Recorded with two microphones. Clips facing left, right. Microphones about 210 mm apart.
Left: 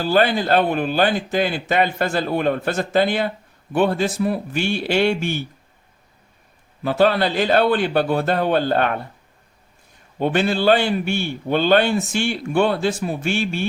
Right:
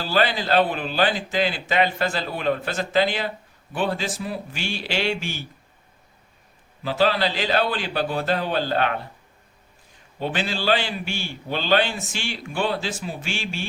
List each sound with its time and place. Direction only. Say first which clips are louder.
0.0 s speech: left 5 dB; 50° left (ahead or behind)
6.8 s speech: left 4 dB; 55° left (ahead or behind)
10.2 s a man's voice: left 7 dB; 55° left (ahead or behind)